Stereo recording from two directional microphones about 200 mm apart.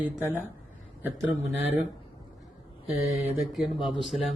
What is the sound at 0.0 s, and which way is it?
Speech, 10° right (ahead or behind).